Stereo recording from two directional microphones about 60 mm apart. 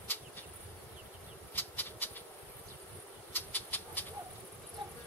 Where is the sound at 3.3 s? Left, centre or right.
Left.